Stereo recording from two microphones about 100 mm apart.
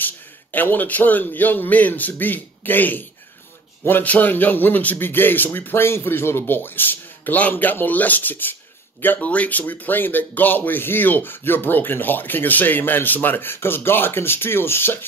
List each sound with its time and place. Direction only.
0.0 s a man's voice: 20° left (ahead or behind)